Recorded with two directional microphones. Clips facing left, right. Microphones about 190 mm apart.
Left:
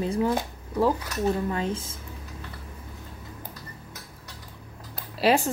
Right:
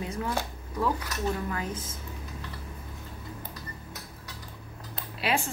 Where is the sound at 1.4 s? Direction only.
25° left (ahead or behind).